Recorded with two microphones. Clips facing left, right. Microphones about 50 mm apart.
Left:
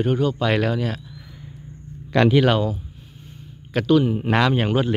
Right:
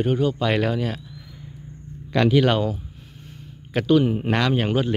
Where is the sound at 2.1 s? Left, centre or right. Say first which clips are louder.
Left 2 dB; left.